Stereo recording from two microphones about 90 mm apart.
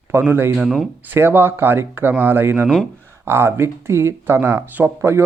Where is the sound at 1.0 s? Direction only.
20° right (ahead or behind).